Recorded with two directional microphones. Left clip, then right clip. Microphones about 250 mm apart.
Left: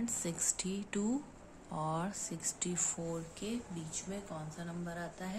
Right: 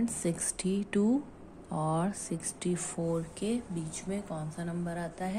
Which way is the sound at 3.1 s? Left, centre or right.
Right.